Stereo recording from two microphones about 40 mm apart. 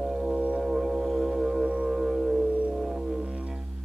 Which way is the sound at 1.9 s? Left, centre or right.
Centre.